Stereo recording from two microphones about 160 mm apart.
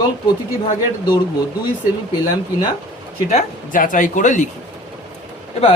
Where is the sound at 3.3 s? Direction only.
55° left (ahead or behind).